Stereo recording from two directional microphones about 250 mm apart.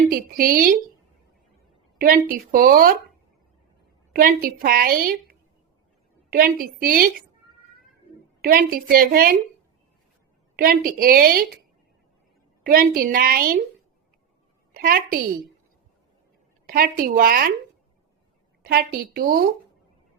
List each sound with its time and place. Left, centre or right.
0.1 s a woman's voice: right
2.0 s a woman's voice: right
4.1 s a woman's voice: right
8.4 s a woman's voice: right
10.6 s a woman's voice: right
12.6 s a woman's voice: right
14.7 s a woman's voice: right
16.6 s a woman's voice: right
18.6 s a woman's voice: right